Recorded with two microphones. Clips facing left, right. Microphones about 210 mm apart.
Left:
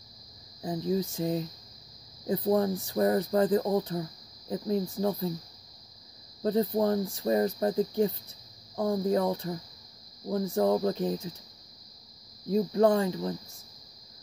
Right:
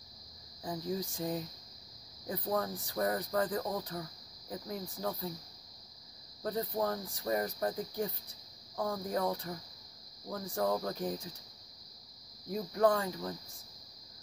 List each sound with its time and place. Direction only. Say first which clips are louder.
0.6 s speech: left 7 dB; 20° left (ahead or behind)
6.4 s speech: left 8 dB; 25° left (ahead or behind)
12.4 s speech: left 6 dB; 25° left (ahead or behind)